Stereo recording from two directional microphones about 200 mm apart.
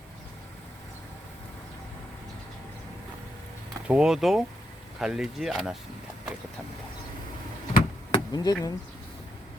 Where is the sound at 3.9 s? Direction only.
5° right (ahead or behind).